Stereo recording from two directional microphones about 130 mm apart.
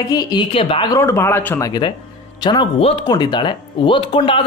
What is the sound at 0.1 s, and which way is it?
Speech, 30° left (ahead or behind).